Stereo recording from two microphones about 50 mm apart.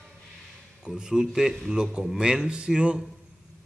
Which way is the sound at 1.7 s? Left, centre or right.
Centre.